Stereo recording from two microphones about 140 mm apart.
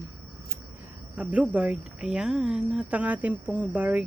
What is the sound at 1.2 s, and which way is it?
Speech, 10° right (ahead or behind).